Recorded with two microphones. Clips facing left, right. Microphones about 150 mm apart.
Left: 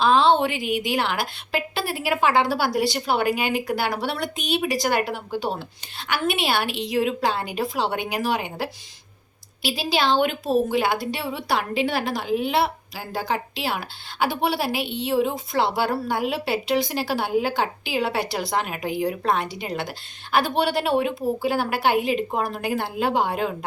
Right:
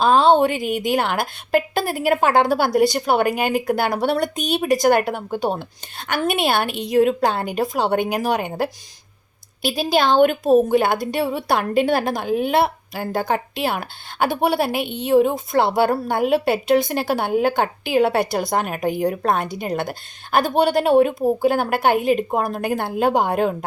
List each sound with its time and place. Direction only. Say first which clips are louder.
0.0 s a woman's voice: right 3 dB; 45° right (ahead or behind)